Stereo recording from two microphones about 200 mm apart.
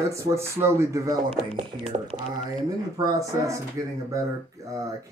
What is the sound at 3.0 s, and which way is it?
Speech, 15° right (ahead or behind).